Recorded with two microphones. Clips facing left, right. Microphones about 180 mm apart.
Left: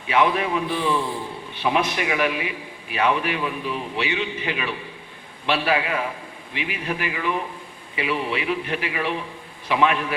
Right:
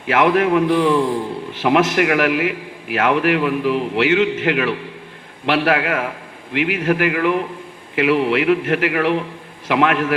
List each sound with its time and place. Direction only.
0.1 s a man's voice: 80° right